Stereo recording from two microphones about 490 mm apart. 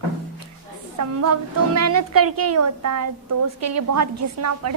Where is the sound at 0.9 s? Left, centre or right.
Right.